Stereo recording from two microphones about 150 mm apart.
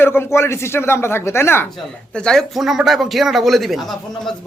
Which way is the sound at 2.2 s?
5° left (ahead or behind).